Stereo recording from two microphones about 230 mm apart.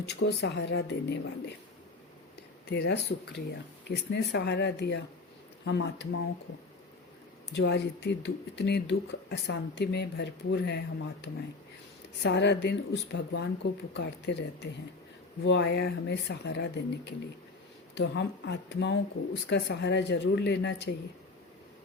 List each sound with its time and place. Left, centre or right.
0.0 s speech: left
2.6 s speech: left
7.5 s speech: left